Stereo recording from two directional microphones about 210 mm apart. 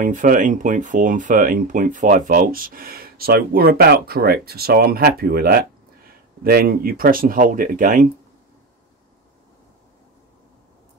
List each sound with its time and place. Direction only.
0.0 s speech: 40° right (ahead or behind)